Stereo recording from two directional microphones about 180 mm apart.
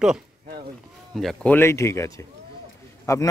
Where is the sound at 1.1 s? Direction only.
5° left (ahead or behind).